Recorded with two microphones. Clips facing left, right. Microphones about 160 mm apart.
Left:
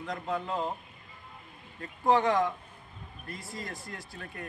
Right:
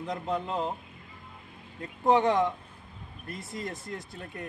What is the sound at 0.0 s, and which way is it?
Speech, 20° right (ahead or behind).